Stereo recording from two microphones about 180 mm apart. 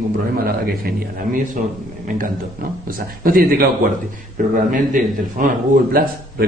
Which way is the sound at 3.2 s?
55° right (ahead or behind).